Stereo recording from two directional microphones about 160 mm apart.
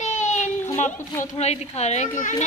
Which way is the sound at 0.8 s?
45° left (ahead or behind).